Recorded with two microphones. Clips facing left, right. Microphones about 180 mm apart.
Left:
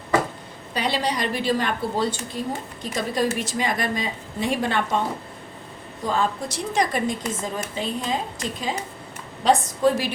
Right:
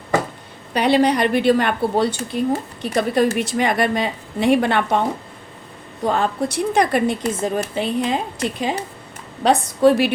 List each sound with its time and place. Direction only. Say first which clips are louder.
0.7 s a woman's voice: right 9 dB; 60° right (ahead or behind)
6.0 s a woman's voice: right 5 dB; 65° right (ahead or behind)